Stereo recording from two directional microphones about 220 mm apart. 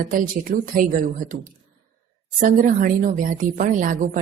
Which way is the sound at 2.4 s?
40° right (ahead or behind).